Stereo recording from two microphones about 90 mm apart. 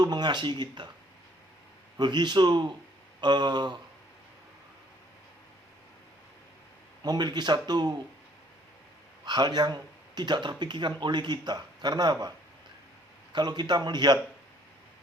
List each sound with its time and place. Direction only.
0.0 s speech: 50° right (ahead or behind)
2.0 s speech: 55° right (ahead or behind)
7.0 s speech: 50° right (ahead or behind)
9.2 s speech: 55° right (ahead or behind)
13.3 s speech: 50° right (ahead or behind)